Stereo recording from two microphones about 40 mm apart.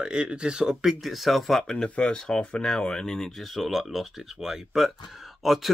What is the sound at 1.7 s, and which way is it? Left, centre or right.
Speech, left.